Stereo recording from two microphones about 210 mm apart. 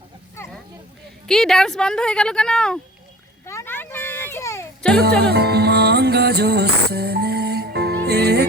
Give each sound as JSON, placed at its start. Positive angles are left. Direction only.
{"t": 1.3, "sound": "a woman's voice", "side_deg": 0}
{"t": 3.4, "sound": "a sound", "side_deg": 15}
{"t": 4.9, "sound": "music", "side_deg": -50}